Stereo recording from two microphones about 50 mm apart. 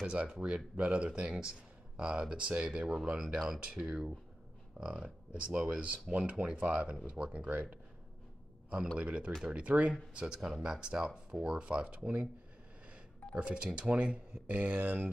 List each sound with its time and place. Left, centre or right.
0.0 s speech: right
3.3 s speech: centre; by 7.4 s right
8.9 s speech: right
13.4 s speech: right